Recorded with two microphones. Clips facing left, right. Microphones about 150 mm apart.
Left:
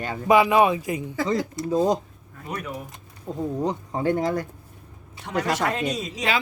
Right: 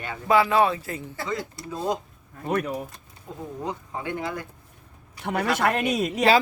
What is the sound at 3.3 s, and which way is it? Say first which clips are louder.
Speech: left 7 dB; 35° left (ahead or behind).